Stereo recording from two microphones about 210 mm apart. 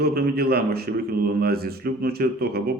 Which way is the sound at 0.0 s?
45° right (ahead or behind).